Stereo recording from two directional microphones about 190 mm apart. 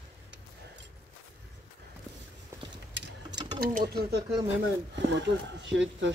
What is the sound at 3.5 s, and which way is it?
Speech, 55° right (ahead or behind).